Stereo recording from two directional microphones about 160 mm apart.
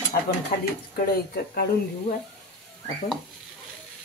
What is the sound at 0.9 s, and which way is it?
Speech, 70° left (ahead or behind).